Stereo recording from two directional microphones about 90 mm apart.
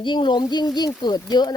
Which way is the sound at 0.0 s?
65° left (ahead or behind).